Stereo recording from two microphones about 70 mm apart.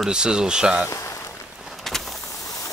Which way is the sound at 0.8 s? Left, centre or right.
Left.